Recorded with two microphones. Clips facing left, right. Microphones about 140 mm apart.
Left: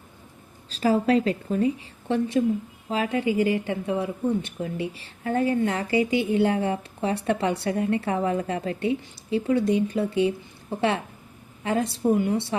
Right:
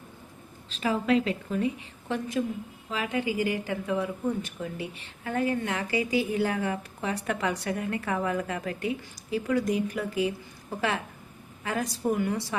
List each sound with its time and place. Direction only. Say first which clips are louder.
0.7 s a woman's voice: left 4 dB; 35° left (ahead or behind)